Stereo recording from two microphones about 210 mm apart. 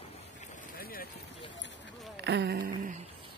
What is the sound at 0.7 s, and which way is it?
Run, 45° left (ahead or behind).